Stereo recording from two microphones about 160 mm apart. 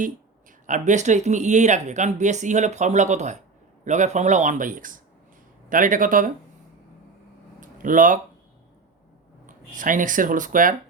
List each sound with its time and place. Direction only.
0.7 s speech: 50° right (ahead or behind)
7.6 s a sound: 55° right (ahead or behind)
9.5 s speech: 55° right (ahead or behind)